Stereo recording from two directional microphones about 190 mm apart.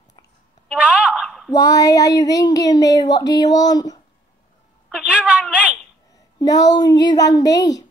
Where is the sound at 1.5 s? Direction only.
15° left (ahead or behind).